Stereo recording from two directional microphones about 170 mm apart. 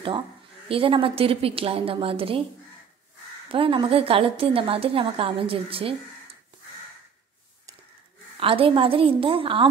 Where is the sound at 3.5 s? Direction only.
30° right (ahead or behind).